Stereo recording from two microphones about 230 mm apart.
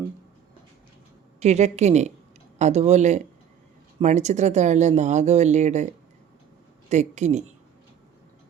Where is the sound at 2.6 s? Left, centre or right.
Right.